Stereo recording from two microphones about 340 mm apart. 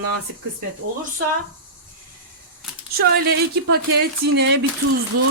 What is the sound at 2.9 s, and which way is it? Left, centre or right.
Speech, right.